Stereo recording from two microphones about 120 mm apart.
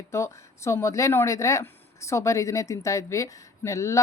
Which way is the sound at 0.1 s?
25° left (ahead or behind).